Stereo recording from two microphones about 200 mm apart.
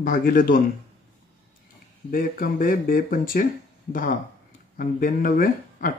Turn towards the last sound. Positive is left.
turn(degrees=45)  # may be behind; listen again after turning